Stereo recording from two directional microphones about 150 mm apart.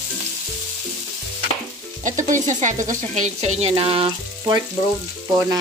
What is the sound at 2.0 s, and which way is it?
Speech, 60° right (ahead or behind).